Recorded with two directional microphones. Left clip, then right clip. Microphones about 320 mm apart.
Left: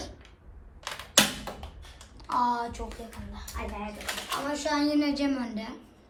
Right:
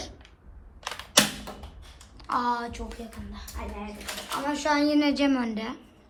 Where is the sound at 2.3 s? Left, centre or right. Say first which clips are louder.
Even; centre.